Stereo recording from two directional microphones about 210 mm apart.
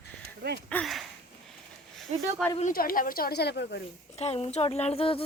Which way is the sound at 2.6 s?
40° left (ahead or behind).